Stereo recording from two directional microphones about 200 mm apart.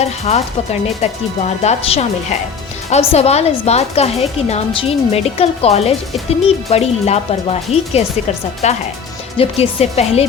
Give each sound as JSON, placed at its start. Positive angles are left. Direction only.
{"t": 0.0, "sound": "a woman's voice", "side_deg": 35}